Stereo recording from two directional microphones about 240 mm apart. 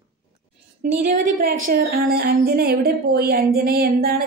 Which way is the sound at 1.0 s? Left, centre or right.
Right.